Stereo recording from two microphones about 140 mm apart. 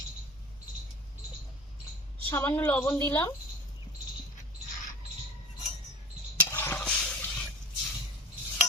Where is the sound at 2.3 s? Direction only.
15° left (ahead or behind).